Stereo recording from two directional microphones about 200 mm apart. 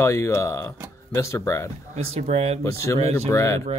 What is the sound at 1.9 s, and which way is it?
Speech, 30° right (ahead or behind).